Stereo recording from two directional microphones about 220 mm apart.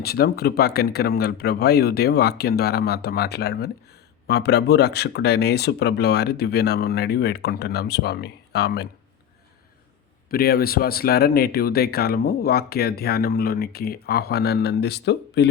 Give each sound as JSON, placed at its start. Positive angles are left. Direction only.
{"t": 0.0, "sound": "speech", "side_deg": 45}
{"t": 10.2, "sound": "speech", "side_deg": 45}